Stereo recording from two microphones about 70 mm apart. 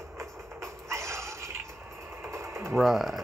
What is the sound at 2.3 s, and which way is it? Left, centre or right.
Sewing machine, right.